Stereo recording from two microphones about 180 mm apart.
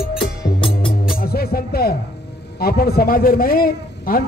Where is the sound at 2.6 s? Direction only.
55° left (ahead or behind).